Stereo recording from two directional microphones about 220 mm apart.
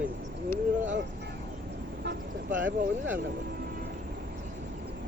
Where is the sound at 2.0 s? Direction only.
50° right (ahead or behind).